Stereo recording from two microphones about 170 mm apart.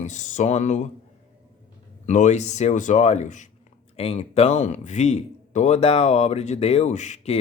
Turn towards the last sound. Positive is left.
turn(degrees=45)  # may be behind; listen again after turning